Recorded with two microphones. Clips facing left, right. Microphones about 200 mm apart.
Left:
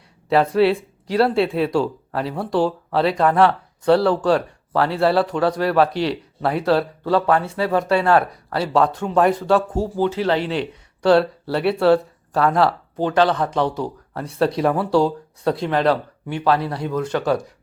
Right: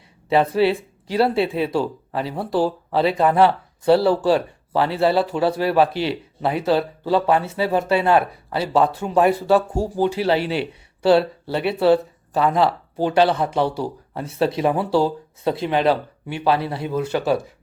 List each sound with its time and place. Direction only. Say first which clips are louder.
0.3 s speech: left 1 dB; centre (ahead or behind)
8.0 s speech: even; 20° right (ahead or behind)
8.5 s speech: even; 5° right (ahead or behind)
13.0 s speech: even; 10° right (ahead or behind)